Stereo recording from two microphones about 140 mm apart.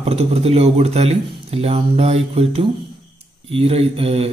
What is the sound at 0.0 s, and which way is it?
Speech, 50° right (ahead or behind).